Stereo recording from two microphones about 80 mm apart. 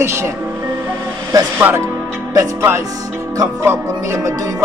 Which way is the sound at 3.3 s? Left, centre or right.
Right.